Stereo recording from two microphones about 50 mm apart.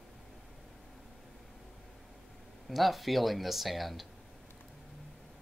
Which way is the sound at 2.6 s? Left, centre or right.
Centre.